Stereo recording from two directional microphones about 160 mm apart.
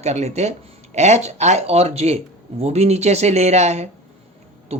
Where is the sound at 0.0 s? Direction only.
45° right (ahead or behind).